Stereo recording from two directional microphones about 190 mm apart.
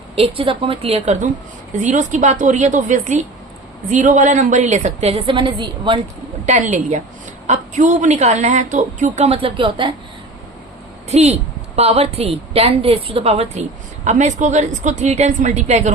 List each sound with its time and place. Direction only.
0.2 s a woman's voice: 30° right (ahead or behind)
6.4 s a woman's voice: 40° right (ahead or behind)
11.1 s a woman's voice: 35° right (ahead or behind)